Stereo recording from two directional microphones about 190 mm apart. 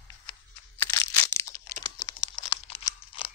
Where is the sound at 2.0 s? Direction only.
25° left (ahead or behind).